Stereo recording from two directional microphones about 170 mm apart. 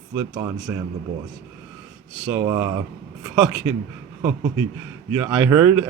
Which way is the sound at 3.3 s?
5° right (ahead or behind).